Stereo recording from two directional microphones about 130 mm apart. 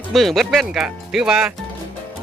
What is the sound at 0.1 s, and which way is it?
Speech, centre (ahead or behind).